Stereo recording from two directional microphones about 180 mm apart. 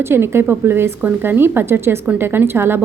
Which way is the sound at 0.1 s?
15° right (ahead or behind).